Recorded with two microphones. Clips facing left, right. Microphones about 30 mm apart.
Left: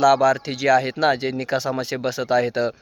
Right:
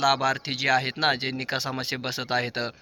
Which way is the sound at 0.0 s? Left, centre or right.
Right.